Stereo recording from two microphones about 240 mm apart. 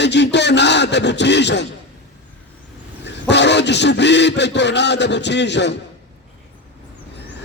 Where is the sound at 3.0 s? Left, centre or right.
Left.